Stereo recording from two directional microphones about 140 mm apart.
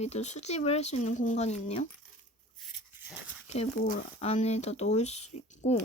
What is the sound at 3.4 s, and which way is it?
Speech, 50° left (ahead or behind).